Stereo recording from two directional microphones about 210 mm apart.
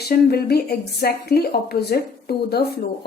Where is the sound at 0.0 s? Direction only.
45° left (ahead or behind).